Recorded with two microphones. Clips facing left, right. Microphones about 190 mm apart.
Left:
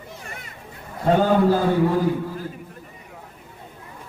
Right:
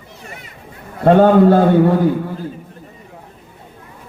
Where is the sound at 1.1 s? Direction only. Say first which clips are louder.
Right 8 dB; 65° right (ahead or behind).